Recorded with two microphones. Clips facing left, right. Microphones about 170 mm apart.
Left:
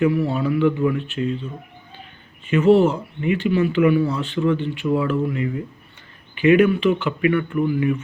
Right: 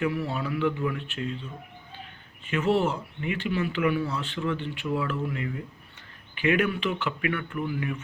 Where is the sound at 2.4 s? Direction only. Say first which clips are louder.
Left 10 dB; centre (ahead or behind).